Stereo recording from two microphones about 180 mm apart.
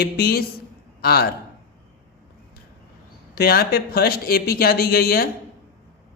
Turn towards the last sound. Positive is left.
turn(degrees=60)  # may be behind; listen again after turning